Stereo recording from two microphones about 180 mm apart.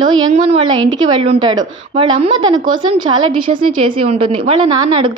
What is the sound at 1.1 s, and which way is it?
A woman's voice, 30° right (ahead or behind).